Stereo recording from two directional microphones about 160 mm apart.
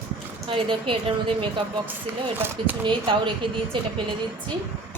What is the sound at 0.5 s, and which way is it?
A woman's voice, 35° right (ahead or behind).